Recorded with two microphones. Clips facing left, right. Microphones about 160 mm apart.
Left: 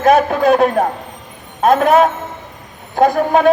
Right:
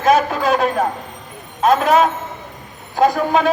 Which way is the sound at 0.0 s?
55° left (ahead or behind).